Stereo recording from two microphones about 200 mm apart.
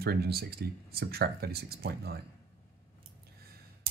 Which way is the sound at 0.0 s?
50° right (ahead or behind).